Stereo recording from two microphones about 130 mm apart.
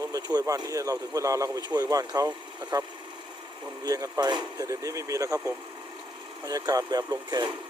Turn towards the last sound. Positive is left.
turn(degrees=-30)  # may be behind; listen again after turning